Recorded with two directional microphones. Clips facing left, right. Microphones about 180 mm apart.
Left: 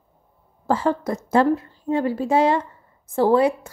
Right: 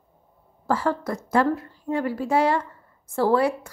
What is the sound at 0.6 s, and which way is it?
A woman's voice, 20° left (ahead or behind).